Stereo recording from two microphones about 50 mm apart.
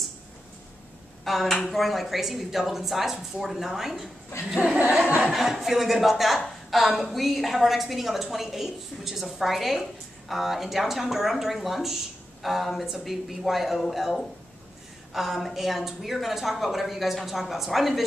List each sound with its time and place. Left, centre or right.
1.2 s speech: centre
4.3 s speech: left
5.2 s speech: centre